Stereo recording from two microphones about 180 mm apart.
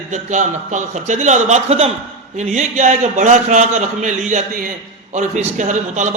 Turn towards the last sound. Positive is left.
turn(degrees=-45)  # may be behind; listen again after turning